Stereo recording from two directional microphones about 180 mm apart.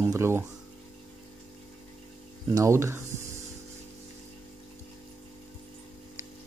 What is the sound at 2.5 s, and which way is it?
Speech, 15° right (ahead or behind).